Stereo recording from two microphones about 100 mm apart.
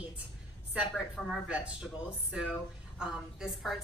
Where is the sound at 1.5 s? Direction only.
10° right (ahead or behind).